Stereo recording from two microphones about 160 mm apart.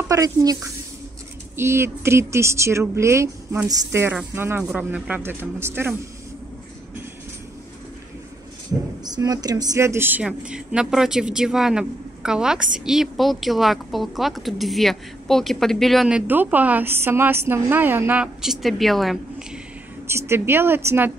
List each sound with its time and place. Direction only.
0.1 s a woman's voice: 20° right (ahead or behind)
9.0 s speech: 25° right (ahead or behind); by 19.6 s 5° right (ahead or behind)
20.1 s a woman's voice: 15° right (ahead or behind)